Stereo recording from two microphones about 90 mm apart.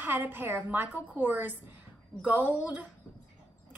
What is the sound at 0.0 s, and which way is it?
Speech, 25° right (ahead or behind).